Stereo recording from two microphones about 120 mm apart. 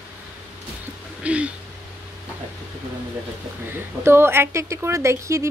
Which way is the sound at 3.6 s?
20° right (ahead or behind).